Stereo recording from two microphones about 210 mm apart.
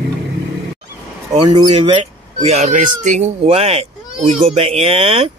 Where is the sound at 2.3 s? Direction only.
35° right (ahead or behind).